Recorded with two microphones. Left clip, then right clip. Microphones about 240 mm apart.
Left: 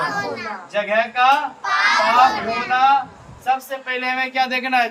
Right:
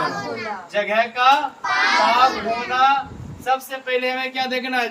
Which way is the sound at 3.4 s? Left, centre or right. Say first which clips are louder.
Left 1 dB; centre.